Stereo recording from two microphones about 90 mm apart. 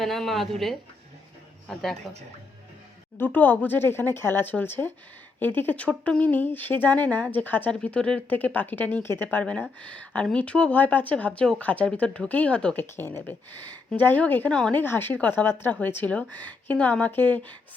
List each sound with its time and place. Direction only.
0.0 s speech: centre (ahead or behind)
3.2 s speech: 20° left (ahead or behind)
12.8 s speech: 25° left (ahead or behind)